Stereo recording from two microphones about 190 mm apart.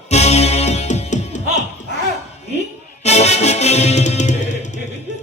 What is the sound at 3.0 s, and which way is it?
Music, 35° left (ahead or behind).